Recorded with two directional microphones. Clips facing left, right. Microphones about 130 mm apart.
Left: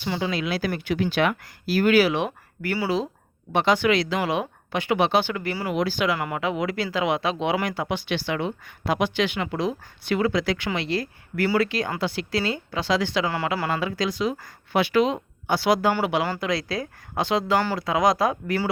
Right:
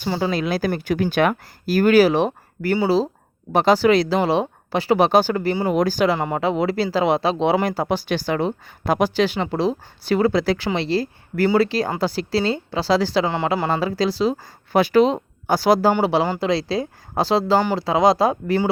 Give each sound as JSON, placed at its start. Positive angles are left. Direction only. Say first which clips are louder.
{"t": 0.0, "sound": "speech", "louder": "right 4 dB", "side_deg": -40}
{"t": 5.7, "sound": "speech", "louder": "right 3 dB", "side_deg": -40}
{"t": 13.3, "sound": "speech", "louder": "right 4 dB", "side_deg": -25}
{"t": 15.9, "sound": "speech", "louder": "right 5 dB", "side_deg": -30}